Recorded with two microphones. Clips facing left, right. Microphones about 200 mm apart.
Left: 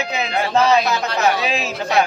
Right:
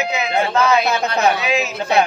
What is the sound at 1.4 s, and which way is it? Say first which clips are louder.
Chatter: right 2 dB; 30° left (ahead or behind).